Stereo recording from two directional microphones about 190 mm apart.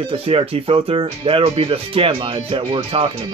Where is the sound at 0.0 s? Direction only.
30° right (ahead or behind).